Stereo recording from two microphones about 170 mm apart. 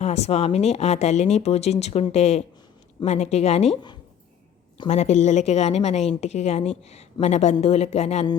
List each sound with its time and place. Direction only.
0.0 s speech: 40° left (ahead or behind)
4.9 s speech: 40° left (ahead or behind)